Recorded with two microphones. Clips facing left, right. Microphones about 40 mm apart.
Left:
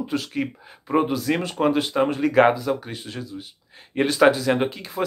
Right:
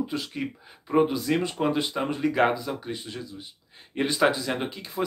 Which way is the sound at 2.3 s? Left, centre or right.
Left.